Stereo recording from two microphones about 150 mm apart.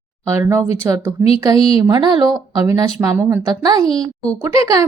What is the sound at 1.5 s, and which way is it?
Speech, 40° left (ahead or behind).